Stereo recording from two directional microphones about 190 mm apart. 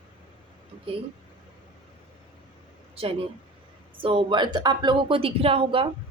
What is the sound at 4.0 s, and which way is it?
Speech, 30° right (ahead or behind).